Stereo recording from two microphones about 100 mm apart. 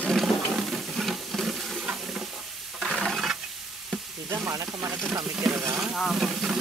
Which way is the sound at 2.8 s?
Centre (ahead or behind).